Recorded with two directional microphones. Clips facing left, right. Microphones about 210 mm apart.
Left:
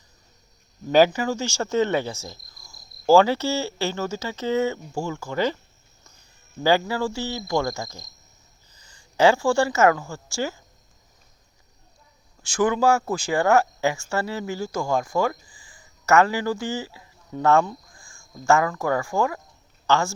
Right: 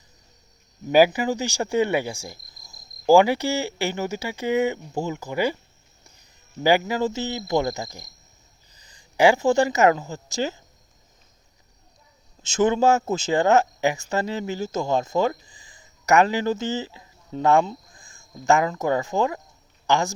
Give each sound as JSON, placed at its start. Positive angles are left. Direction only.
{"t": 0.9, "sound": "cricket", "side_deg": -10}
{"t": 6.6, "sound": "cricket", "side_deg": -15}
{"t": 8.8, "sound": "a woman's voice", "side_deg": -15}
{"t": 12.4, "sound": "speech", "side_deg": -20}
{"t": 19.9, "sound": "cricket", "side_deg": -15}